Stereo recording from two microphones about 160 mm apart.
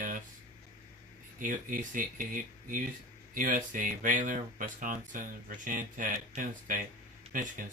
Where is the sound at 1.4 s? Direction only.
55° right (ahead or behind).